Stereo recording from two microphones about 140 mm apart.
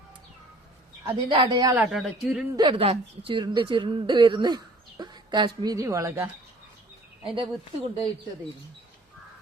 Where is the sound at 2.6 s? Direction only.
35° right (ahead or behind); by 6.3 s 20° right (ahead or behind).